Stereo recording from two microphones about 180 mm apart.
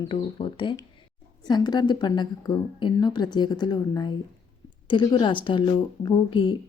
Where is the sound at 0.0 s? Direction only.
30° left (ahead or behind).